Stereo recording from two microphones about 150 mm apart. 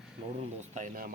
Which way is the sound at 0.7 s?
60° right (ahead or behind).